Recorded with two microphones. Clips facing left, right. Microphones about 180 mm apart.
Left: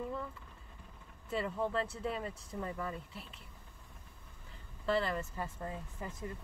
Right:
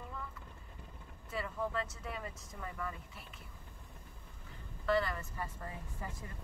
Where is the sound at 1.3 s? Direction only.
25° left (ahead or behind).